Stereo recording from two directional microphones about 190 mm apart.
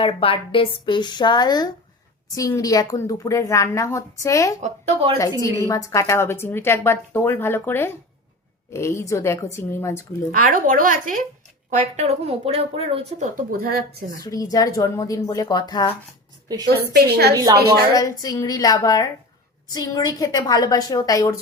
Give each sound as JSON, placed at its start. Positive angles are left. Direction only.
{"t": 0.0, "sound": "a woman's voice", "side_deg": 30}
{"t": 10.3, "sound": "speech", "side_deg": -45}
{"t": 14.3, "sound": "a woman's voice", "side_deg": 20}
{"t": 16.6, "sound": "a woman's voice", "side_deg": -55}
{"t": 17.3, "sound": "a woman's voice", "side_deg": -20}
{"t": 17.9, "sound": "a woman's voice", "side_deg": 20}